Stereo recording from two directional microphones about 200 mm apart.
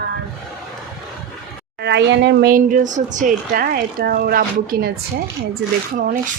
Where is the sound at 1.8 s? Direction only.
60° right (ahead or behind).